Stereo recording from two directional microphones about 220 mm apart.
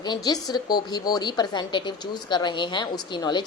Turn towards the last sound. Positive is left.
turn(degrees=20)  # may be behind; listen again after turning